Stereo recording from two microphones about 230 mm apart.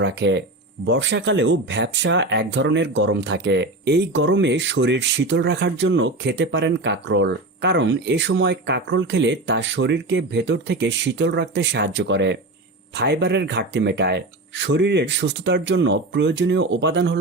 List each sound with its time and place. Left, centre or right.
0.0 s speech: right